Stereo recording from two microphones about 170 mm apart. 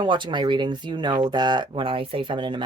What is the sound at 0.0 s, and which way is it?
Speech, 30° right (ahead or behind).